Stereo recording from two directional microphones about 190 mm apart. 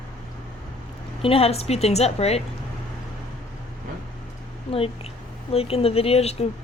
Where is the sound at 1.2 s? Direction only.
30° left (ahead or behind).